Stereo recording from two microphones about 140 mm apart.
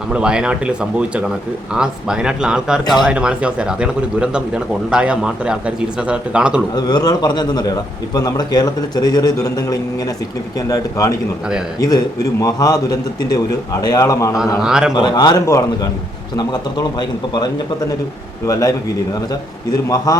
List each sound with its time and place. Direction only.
0.1 s speech: 5° right (ahead or behind)
6.7 s a man's voice: 30° left (ahead or behind)
14.6 s speech: 5° right (ahead or behind)
14.9 s a man's voice: 30° left (ahead or behind)
20.1 s a man's voice: 25° left (ahead or behind)